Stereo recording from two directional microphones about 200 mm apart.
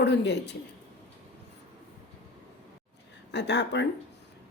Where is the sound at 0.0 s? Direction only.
60° left (ahead or behind).